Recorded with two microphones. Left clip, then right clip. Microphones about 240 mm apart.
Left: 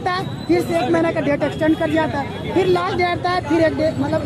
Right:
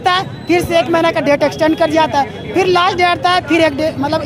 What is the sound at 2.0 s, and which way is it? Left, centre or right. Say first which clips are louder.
Speech: right 8 dB; right.